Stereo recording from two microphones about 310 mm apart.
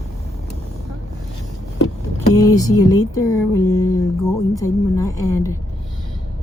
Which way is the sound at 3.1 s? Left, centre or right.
Centre.